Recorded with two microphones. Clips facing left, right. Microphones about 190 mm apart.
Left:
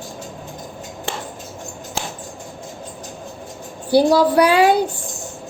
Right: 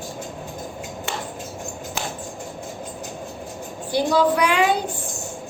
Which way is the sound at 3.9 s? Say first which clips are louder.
Left 5 dB; 35° left (ahead or behind).